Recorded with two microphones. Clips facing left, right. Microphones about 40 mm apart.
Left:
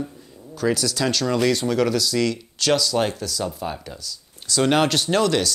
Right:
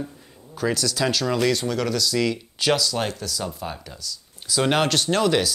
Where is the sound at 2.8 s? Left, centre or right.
Centre.